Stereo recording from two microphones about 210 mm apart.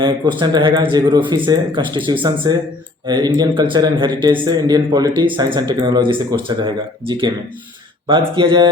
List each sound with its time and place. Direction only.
0.0 s speech: 20° right (ahead or behind)